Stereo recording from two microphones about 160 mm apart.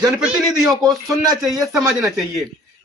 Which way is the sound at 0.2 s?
5° right (ahead or behind).